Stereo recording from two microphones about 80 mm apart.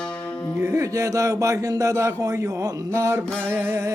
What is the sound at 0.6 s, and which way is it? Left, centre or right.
Speech, right.